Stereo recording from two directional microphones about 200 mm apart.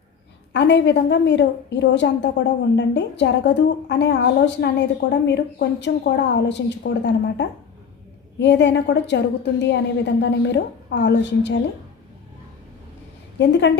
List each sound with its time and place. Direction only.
0.5 s a woman's voice: 60° left (ahead or behind)
13.4 s a woman's voice: 60° left (ahead or behind)